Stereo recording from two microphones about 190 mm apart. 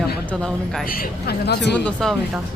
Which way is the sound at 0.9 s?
55° left (ahead or behind).